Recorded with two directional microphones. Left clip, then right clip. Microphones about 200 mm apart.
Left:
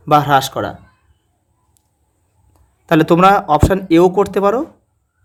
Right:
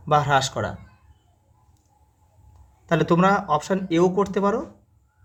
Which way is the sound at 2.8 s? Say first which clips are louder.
Left 9 dB; 40° left (ahead or behind).